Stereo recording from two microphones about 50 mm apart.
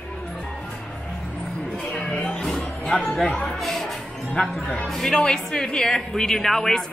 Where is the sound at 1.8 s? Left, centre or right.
Left.